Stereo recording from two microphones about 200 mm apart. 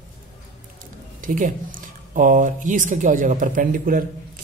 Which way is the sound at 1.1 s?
40° right (ahead or behind).